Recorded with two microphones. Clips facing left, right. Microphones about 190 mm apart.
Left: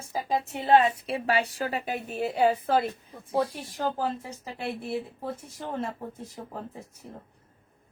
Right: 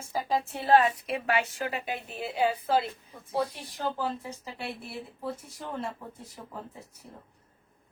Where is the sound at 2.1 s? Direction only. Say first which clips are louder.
Left 5 dB; 45° left (ahead or behind).